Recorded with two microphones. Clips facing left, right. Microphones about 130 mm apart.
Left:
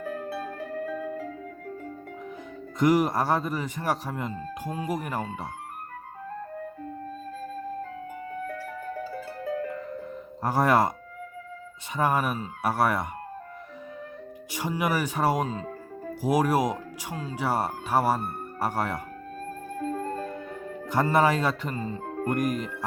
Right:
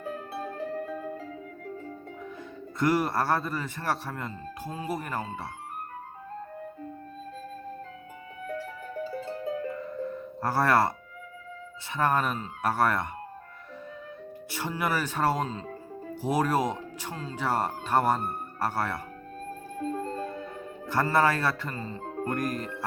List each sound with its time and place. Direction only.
0.0 s music: 25° right (ahead or behind)
2.7 s speech: 15° left (ahead or behind)
9.0 s music: 25° right (ahead or behind)
10.4 s speech: 15° left (ahead or behind)
11.9 s speech: 10° left (ahead or behind)
14.5 s speech: 15° left (ahead or behind)
19.8 s music: 25° right (ahead or behind)
20.8 s speech: 15° left (ahead or behind)